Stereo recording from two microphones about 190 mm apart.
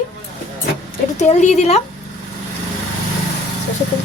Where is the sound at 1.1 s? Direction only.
35° left (ahead or behind).